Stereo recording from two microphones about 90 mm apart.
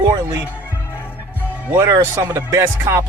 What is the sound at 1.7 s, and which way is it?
Speech, 30° right (ahead or behind).